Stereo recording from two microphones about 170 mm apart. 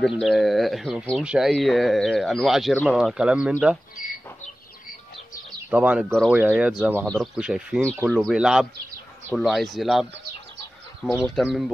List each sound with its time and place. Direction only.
0.0 s speech: centre (ahead or behind)
4.0 s a sound: 55° left (ahead or behind)
5.7 s speech: 5° right (ahead or behind)
11.1 s speech: centre (ahead or behind)